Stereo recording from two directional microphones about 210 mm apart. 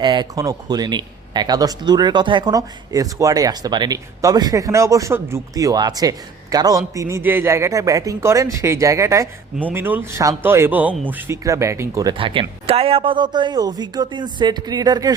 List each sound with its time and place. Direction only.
0.0 s a man's voice: 20° right (ahead or behind)